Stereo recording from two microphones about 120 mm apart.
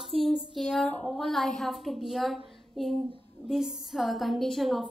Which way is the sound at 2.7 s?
Centre (ahead or behind).